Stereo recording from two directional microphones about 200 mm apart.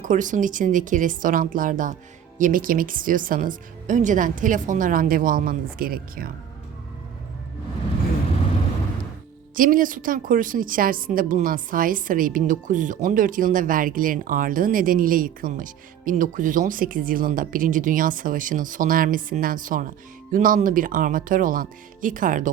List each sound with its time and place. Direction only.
0.0 s a woman's voice: 40° right (ahead or behind)
9.6 s a woman's voice: 45° right (ahead or behind)